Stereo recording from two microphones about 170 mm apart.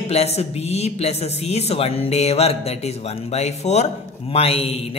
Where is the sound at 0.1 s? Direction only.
40° left (ahead or behind).